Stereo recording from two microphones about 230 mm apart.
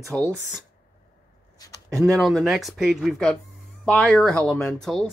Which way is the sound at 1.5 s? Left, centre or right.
Centre.